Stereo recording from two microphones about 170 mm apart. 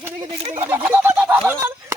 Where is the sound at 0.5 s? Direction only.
15° right (ahead or behind).